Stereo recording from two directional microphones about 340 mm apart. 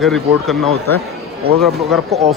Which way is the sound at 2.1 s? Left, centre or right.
Centre.